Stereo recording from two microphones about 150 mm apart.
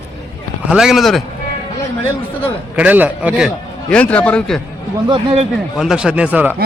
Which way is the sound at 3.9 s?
10° left (ahead or behind).